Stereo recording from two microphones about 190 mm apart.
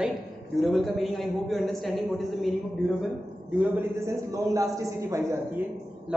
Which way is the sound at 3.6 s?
10° right (ahead or behind).